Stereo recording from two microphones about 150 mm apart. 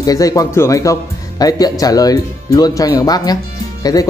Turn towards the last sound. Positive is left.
turn(degrees=25)  # may be behind; listen again after turning